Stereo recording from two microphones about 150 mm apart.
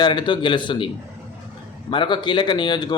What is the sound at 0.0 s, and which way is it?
Speech, 30° left (ahead or behind).